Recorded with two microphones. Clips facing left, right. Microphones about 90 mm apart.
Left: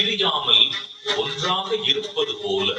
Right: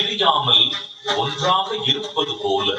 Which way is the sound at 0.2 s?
45° right (ahead or behind).